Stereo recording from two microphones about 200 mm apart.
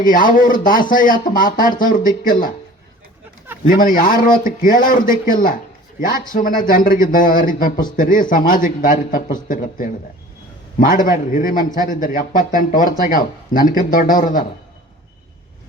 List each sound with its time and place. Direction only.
0.0 s speech: 45° left (ahead or behind)
3.7 s speech: 45° left (ahead or behind)